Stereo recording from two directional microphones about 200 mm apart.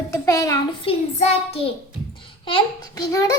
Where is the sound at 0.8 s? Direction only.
30° left (ahead or behind).